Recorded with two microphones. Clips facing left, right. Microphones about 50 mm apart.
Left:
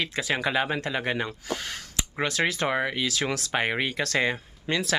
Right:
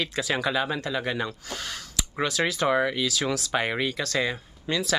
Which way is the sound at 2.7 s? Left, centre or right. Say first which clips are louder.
Right 3 dB; left.